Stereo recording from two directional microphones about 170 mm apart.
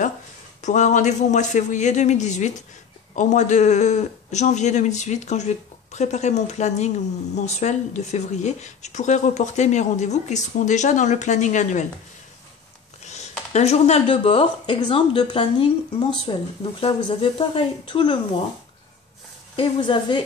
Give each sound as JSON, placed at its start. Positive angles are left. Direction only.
{"t": 0.6, "sound": "speech", "side_deg": 45}
{"t": 13.0, "sound": "speech", "side_deg": 40}
{"t": 19.5, "sound": "speech", "side_deg": 30}